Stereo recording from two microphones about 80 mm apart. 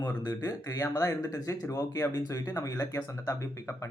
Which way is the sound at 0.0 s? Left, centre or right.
Left.